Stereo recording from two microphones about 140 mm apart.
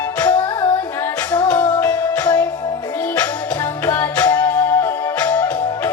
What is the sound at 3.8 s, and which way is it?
Music, 20° left (ahead or behind).